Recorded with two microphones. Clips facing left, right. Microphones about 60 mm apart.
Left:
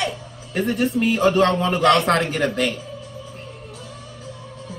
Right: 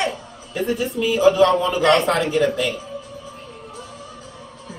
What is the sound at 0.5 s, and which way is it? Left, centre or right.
Speech, left.